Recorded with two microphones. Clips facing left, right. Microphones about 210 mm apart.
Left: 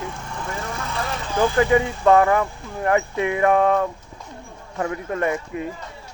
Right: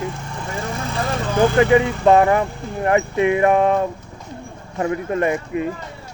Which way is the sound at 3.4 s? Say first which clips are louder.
Right 2 dB; 15° right (ahead or behind).